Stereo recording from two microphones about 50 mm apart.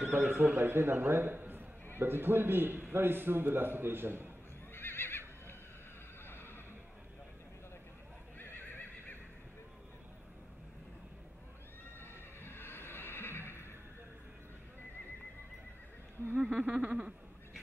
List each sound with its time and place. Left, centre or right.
0.0 s a man's voice: right
4.7 s neigh: left
6.2 s neigh: left
8.4 s neigh: left
12.0 s neigh: left
16.3 s a sound: right